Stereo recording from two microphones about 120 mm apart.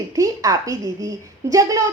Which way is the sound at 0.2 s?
30° right (ahead or behind).